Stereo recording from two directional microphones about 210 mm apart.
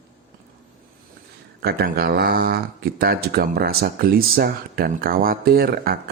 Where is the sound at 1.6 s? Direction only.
45° right (ahead or behind).